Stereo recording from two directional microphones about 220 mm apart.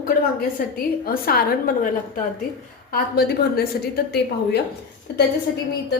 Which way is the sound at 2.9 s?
45° left (ahead or behind).